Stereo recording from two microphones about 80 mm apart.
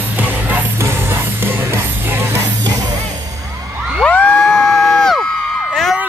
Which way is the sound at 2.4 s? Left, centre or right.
Right.